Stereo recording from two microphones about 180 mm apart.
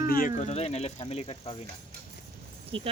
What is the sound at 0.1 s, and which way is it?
Speech, 50° left (ahead or behind).